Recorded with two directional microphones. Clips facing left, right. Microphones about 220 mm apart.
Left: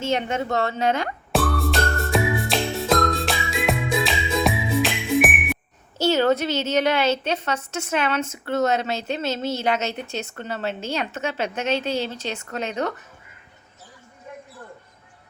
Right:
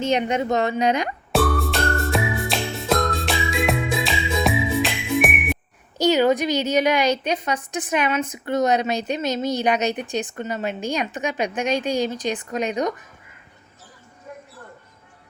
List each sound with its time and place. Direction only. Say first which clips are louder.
0.0 s a woman's voice: right 3 dB; 15° right (ahead or behind)
1.3 s music: right 1 dB; centre (ahead or behind)
6.0 s a woman's voice: right 2 dB; 15° right (ahead or behind)